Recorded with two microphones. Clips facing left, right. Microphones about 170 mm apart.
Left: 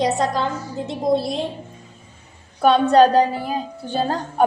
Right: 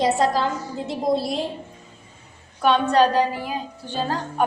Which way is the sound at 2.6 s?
40° left (ahead or behind).